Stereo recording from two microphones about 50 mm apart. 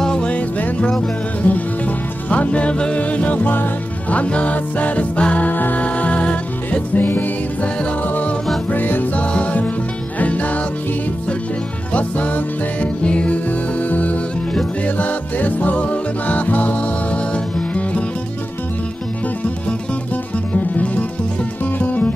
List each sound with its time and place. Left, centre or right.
0.0 s music: centre
0.3 s music: left
8.6 s music: left
9.2 s music: left
11.9 s music: left
13.5 s music: left
20.5 s music: left